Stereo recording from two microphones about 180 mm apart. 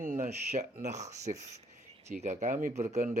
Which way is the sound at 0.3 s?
40° right (ahead or behind).